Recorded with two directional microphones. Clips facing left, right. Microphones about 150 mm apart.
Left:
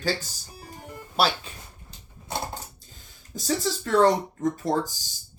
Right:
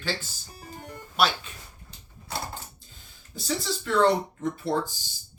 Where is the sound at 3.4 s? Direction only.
40° left (ahead or behind).